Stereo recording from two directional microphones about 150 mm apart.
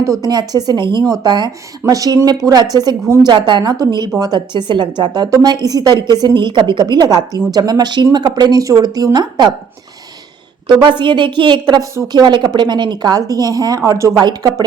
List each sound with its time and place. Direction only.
0.0 s a woman's voice: 20° right (ahead or behind)
10.8 s a woman's voice: 30° right (ahead or behind)